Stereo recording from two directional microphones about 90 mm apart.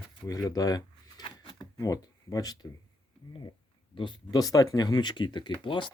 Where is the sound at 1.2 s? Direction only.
65° left (ahead or behind).